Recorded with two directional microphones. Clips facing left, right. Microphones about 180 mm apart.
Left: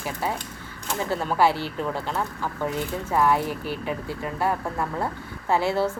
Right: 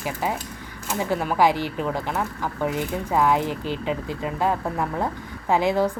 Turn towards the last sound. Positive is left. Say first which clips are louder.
# right 2 dB
turn(degrees=-15)  # may be behind; listen again after turning